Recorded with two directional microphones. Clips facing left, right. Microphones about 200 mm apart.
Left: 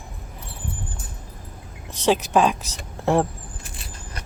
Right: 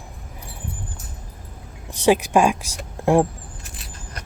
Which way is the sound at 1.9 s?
15° right (ahead or behind).